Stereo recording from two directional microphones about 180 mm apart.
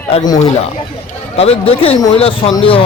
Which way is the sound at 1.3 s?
35° left (ahead or behind).